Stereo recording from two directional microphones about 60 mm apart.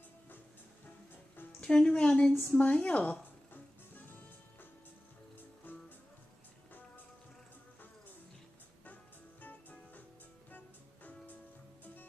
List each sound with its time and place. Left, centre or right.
1.6 s a woman's voice: centre
5.7 s music: left
9.4 s music: left
11.8 s music: left